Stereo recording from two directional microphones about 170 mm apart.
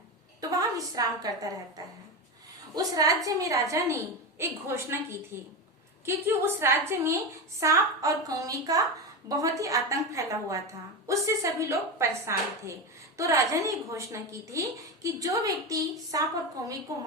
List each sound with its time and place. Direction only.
0.4 s a woman's voice: 20° right (ahead or behind)